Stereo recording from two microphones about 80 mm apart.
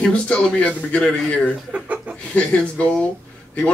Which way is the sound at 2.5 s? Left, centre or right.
Centre.